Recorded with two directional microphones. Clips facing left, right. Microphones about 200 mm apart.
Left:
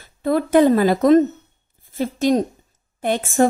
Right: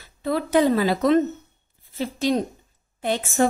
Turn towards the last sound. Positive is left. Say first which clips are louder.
# left 4 dB
turn(degrees=50)  # may be behind; listen again after turning